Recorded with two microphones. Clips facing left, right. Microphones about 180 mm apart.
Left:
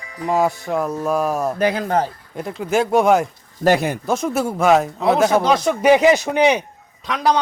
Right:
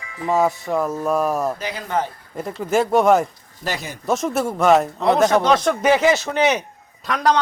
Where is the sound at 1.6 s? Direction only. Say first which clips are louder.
Left 10 dB; 55° left (ahead or behind).